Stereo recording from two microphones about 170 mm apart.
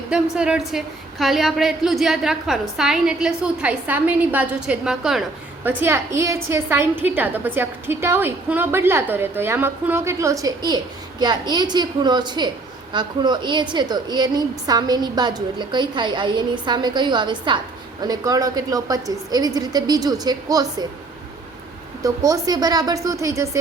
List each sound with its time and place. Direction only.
0.1 s a woman's voice: 5° right (ahead or behind)
5.6 s a woman's voice: 15° right (ahead or behind)
22.0 s a woman's voice: 20° right (ahead or behind)